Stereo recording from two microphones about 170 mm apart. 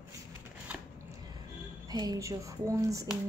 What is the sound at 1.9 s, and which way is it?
Speech, 20° right (ahead or behind).